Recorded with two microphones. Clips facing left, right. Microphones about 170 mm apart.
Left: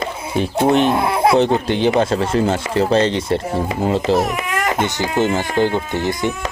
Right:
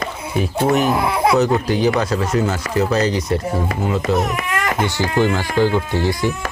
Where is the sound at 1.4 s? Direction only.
25° left (ahead or behind).